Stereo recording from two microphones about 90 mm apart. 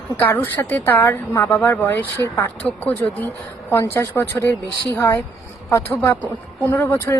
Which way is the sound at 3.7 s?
30° left (ahead or behind).